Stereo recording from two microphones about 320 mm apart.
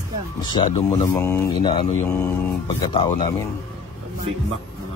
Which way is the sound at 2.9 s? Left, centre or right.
Centre.